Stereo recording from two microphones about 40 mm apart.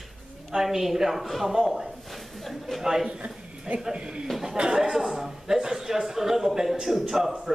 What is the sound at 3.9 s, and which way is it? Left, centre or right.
Speech, right.